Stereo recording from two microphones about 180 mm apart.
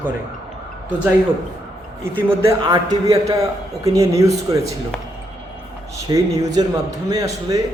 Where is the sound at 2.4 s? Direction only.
20° right (ahead or behind).